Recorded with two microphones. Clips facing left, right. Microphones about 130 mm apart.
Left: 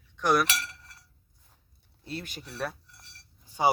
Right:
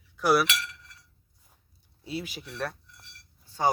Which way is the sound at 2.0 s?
5° right (ahead or behind).